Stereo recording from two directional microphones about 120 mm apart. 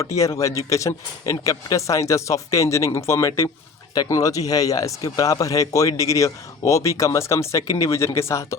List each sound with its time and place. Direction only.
0.0 s speech: 25° left (ahead or behind)